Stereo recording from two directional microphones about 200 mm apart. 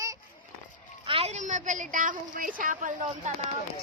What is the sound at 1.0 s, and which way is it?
A woman's voice, 30° right (ahead or behind).